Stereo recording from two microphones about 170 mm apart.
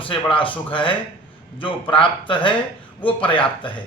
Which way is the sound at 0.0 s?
30° left (ahead or behind).